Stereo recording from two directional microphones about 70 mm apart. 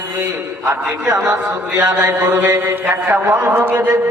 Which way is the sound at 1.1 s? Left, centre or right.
Right.